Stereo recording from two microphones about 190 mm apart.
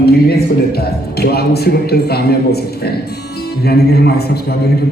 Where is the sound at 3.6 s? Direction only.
55° left (ahead or behind).